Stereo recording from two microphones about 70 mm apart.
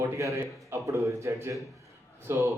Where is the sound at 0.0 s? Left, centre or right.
Right.